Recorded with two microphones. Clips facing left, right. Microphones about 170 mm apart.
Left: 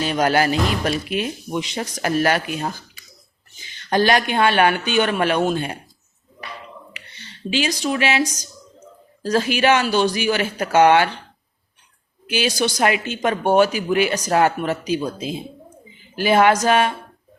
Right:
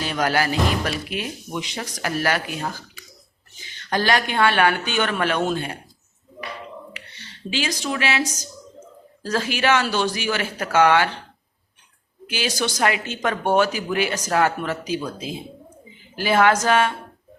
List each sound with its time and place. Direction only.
0.0 s speech: 20° left (ahead or behind)
3.8 s speech: 20° left (ahead or behind)
7.5 s speech: 15° left (ahead or behind)
12.3 s speech: 15° left (ahead or behind)